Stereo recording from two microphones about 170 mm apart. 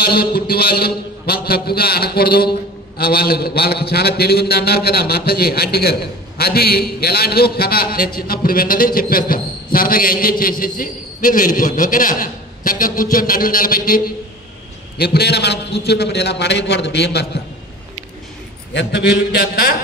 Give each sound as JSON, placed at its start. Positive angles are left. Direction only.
{"t": 0.0, "sound": "a man's voice", "side_deg": 65}
{"t": 15.0, "sound": "a man's voice", "side_deg": 70}
{"t": 18.7, "sound": "a man's voice", "side_deg": 90}